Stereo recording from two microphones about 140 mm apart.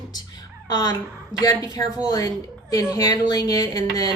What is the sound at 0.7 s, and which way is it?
A woman's voice, 25° left (ahead or behind).